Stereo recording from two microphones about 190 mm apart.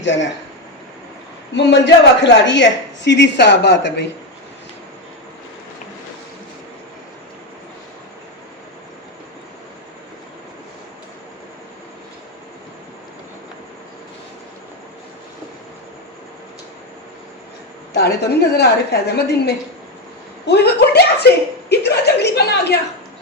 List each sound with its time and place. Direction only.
0.0 s speech: 70° left (ahead or behind)
1.5 s a woman's voice: 65° left (ahead or behind)
17.9 s a woman's voice: 60° left (ahead or behind)